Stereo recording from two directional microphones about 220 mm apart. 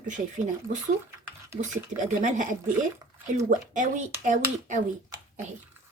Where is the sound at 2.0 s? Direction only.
35° right (ahead or behind).